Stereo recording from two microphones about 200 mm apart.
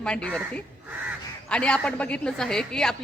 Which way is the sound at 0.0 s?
5° left (ahead or behind).